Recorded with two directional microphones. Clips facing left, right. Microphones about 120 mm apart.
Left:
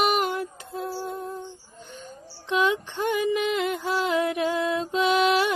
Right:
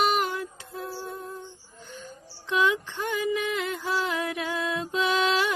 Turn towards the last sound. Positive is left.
turn(degrees=20)  # may be behind; listen again after turning